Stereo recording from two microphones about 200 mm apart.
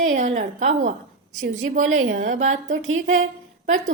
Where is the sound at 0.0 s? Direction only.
35° right (ahead or behind).